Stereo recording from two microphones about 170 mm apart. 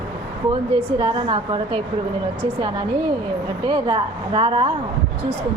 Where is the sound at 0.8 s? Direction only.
30° right (ahead or behind).